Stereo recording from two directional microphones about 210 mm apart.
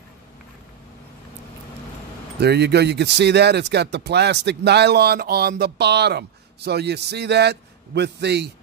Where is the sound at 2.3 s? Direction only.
50° right (ahead or behind).